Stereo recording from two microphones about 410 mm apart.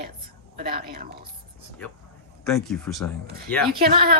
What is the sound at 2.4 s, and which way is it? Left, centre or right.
Speech, centre.